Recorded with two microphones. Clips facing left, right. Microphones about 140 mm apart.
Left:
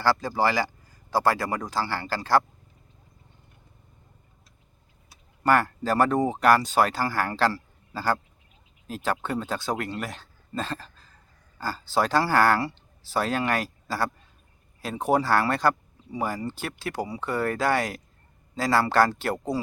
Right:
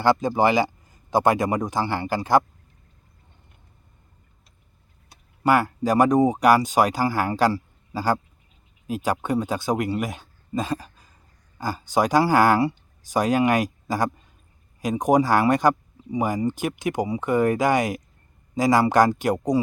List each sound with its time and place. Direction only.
0.0 s speech: 20° right (ahead or behind)
5.4 s speech: 10° right (ahead or behind)